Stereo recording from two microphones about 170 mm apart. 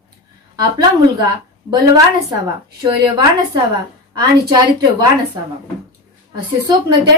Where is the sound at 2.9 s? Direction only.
20° right (ahead or behind).